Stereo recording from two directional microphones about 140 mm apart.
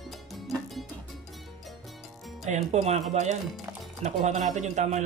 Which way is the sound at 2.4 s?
55° right (ahead or behind).